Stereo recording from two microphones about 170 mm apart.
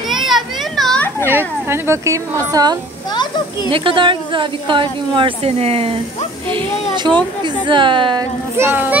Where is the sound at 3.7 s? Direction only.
30° right (ahead or behind).